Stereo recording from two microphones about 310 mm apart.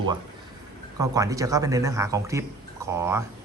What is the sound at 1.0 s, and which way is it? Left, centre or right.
Speech, centre.